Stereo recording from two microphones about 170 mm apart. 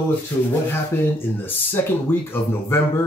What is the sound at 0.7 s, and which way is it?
Speech, 15° left (ahead or behind).